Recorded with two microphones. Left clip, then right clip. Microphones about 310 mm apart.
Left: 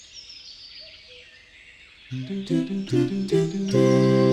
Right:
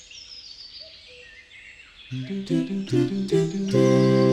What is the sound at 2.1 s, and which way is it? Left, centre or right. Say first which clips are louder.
Music: even; centre.